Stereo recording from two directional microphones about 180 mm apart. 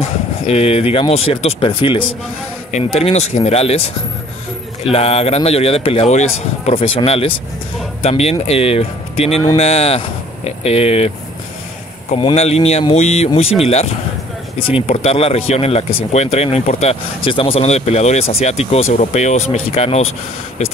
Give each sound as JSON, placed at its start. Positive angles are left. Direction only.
{"t": 0.0, "sound": "speech", "side_deg": 35}
{"t": 12.1, "sound": "speech", "side_deg": 35}